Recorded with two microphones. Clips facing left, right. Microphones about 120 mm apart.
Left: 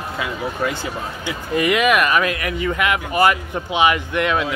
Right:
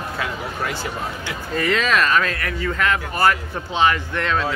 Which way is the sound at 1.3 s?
15° left (ahead or behind).